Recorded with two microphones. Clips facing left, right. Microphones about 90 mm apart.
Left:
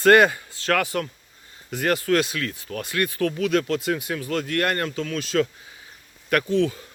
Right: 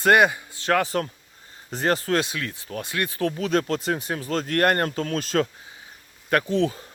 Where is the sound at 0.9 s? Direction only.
35° right (ahead or behind).